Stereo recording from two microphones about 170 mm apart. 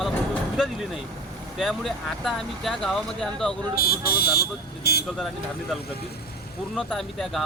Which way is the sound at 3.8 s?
65° left (ahead or behind).